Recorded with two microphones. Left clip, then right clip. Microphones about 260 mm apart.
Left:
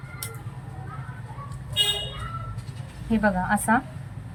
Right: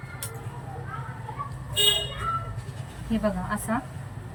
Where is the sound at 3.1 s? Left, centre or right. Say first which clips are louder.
Left 5 dB; centre.